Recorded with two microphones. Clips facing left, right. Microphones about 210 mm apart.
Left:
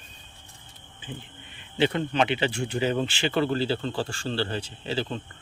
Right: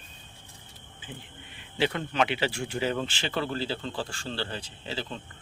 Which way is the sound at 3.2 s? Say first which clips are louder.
Left 7 dB; 65° left (ahead or behind).